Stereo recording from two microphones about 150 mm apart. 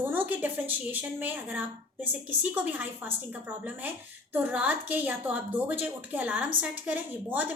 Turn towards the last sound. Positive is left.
turn(degrees=-10)  # may be behind; listen again after turning